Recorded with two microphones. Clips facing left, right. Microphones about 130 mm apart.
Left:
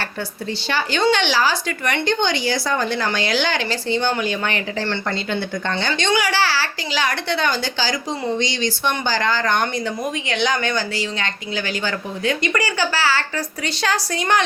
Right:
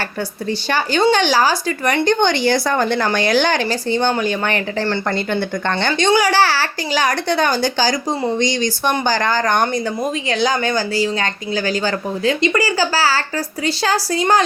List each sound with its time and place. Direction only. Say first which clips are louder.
0.7 s a woman's voice: right 3 dB; 45° right (ahead or behind)
2.1 s a woman's voice: right 5 dB; 55° right (ahead or behind)
5.9 s a woman's voice: right 6 dB; 35° right (ahead or behind)